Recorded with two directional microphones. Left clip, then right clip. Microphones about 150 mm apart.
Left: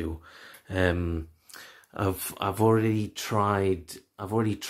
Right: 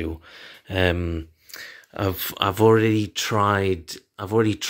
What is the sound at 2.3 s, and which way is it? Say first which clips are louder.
Speech: right 7 dB; 20° right (ahead or behind).